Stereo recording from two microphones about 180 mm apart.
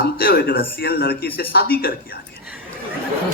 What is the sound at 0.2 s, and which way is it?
A man's voice, 60° left (ahead or behind).